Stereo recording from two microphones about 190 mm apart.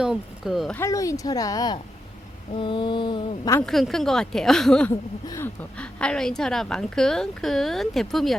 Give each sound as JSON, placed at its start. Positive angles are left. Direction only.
{"t": 0.0, "sound": "speech", "side_deg": -5}
{"t": 0.8, "sound": "speech", "side_deg": 15}
{"t": 3.7, "sound": "a woman's voice", "side_deg": 0}